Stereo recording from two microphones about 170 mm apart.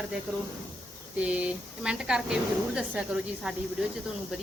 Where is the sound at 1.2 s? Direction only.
5° right (ahead or behind).